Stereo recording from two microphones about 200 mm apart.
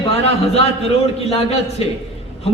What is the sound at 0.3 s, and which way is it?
A woman's voice, 30° left (ahead or behind).